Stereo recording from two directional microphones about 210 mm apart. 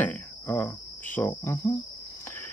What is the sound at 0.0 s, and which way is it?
Cricket, 10° left (ahead or behind).